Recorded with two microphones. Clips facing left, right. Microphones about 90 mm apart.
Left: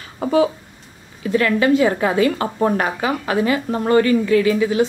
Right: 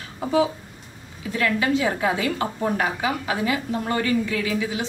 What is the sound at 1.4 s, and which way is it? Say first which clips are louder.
A woman's voice: left 5 dB; 55° left (ahead or behind).